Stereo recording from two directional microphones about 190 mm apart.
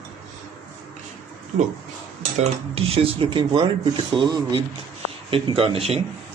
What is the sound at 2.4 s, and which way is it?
Speech, 30° right (ahead or behind).